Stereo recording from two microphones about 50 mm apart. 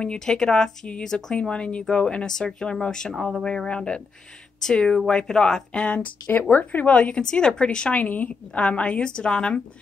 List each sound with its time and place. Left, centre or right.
0.0 s speech: centre
3.4 s a woman's voice: centre
7.9 s a woman's voice: left; by 9.6 s centre